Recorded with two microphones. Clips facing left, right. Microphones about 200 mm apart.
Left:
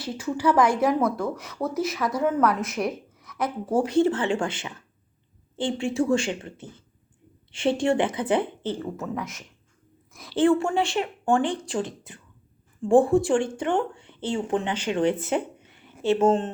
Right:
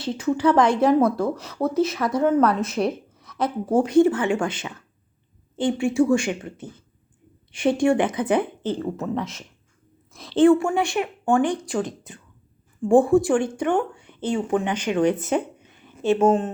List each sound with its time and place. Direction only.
0.0 s speech: 20° right (ahead or behind)
5.8 s a woman's voice: 10° right (ahead or behind)